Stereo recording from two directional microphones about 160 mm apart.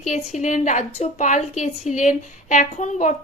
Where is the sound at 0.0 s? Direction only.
45° left (ahead or behind).